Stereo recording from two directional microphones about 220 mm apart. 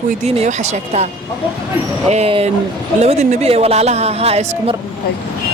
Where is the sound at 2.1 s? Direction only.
25° right (ahead or behind).